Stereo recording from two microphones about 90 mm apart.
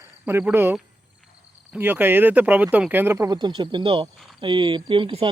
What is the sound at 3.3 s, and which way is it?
Speech, 50° right (ahead or behind).